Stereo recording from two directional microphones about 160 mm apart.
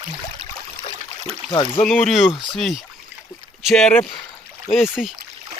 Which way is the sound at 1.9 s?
Centre (ahead or behind).